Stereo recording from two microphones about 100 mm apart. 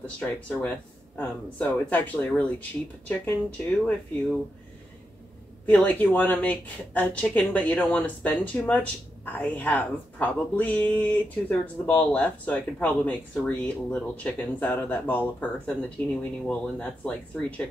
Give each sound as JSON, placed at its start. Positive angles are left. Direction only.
{"t": 0.0, "sound": "speech", "side_deg": 15}
{"t": 5.7, "sound": "speech", "side_deg": 15}